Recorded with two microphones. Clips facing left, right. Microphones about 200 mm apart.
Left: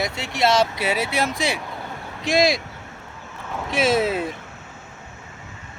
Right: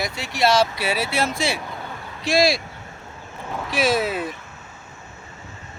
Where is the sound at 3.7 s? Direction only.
25° left (ahead or behind).